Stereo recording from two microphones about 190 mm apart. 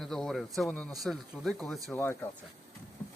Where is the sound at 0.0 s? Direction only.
Centre (ahead or behind).